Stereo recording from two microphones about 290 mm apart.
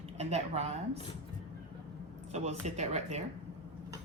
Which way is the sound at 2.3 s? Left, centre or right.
Right.